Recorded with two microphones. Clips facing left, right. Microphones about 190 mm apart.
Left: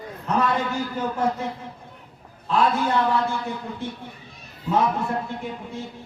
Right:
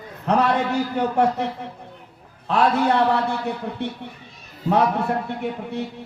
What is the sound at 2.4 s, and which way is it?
A man's voice, 65° right (ahead or behind).